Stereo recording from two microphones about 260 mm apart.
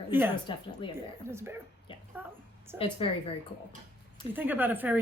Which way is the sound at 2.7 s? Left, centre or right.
Centre.